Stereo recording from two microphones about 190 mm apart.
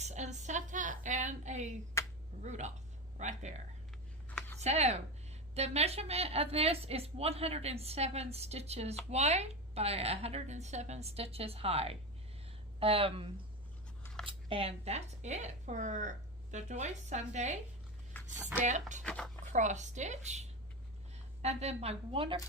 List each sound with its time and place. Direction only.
0.0 s a woman's voice: 35° right (ahead or behind)
2.0 s a sound: 15° left (ahead or behind)
2.4 s a woman's voice: 35° right (ahead or behind)
4.3 s a sound: 10° left (ahead or behind)
4.6 s a woman's voice: 35° right (ahead or behind)
18.3 s speech: 10° right (ahead or behind)
18.6 s a woman's voice: 40° right (ahead or behind)
19.0 s speech: 5° left (ahead or behind)
19.5 s a woman's voice: 40° right (ahead or behind)